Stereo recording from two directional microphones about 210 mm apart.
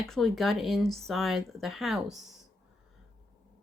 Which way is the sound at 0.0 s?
Centre (ahead or behind).